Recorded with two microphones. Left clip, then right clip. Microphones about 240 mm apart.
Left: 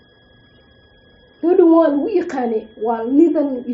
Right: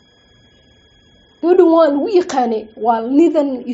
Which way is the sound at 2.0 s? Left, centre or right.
Right.